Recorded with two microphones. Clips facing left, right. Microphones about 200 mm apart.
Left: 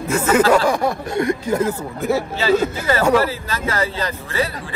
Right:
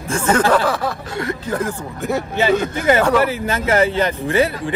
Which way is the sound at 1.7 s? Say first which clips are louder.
Left 2 dB; centre (ahead or behind).